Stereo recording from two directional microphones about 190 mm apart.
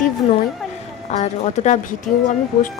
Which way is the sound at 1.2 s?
40° left (ahead or behind).